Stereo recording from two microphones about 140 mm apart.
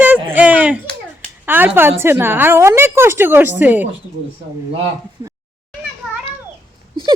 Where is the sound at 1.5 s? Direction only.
15° right (ahead or behind).